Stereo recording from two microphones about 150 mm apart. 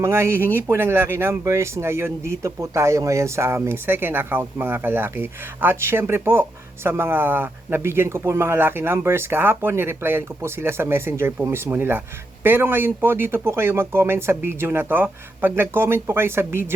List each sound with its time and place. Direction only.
0.0 s speech: 15° right (ahead or behind)